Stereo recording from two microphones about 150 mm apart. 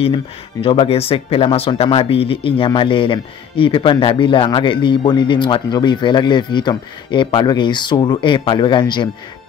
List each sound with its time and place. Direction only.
0.0 s speech: 35° left (ahead or behind)